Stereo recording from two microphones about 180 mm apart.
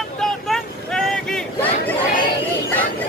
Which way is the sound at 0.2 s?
5° left (ahead or behind).